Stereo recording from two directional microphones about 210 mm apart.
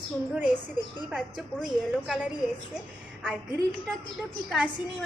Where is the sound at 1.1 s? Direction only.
Centre (ahead or behind).